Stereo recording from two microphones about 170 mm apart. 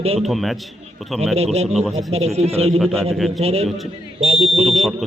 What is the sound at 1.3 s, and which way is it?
Speech, 40° right (ahead or behind).